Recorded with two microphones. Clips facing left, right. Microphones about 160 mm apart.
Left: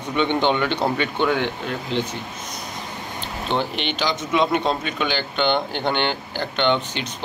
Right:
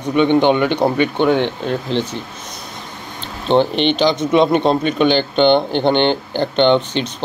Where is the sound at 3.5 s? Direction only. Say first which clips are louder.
Right 11 dB; 25° right (ahead or behind).